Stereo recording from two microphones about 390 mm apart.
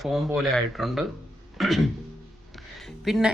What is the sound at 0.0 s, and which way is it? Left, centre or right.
Speech, centre.